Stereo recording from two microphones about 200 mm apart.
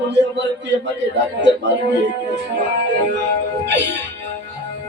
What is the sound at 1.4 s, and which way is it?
Speech, 60° right (ahead or behind).